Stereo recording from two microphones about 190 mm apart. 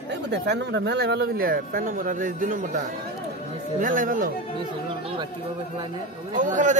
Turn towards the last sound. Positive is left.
turn(degrees=-40)  # may be behind; listen again after turning